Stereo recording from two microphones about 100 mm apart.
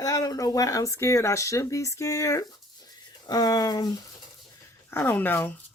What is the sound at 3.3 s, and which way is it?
Speech, 40° left (ahead or behind).